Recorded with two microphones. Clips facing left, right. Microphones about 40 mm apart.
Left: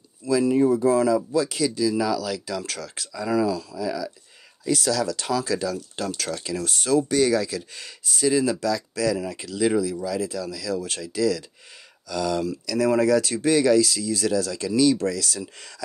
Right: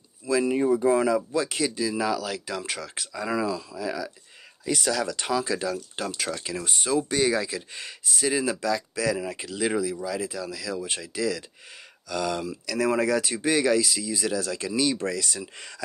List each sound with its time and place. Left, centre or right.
0.3 s speech: right